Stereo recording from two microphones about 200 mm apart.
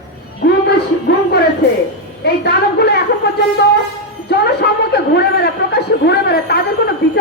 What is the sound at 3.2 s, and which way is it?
Shofar, 50° left (ahead or behind).